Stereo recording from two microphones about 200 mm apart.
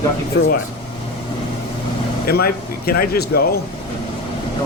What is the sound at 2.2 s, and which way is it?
Speech, 50° left (ahead or behind).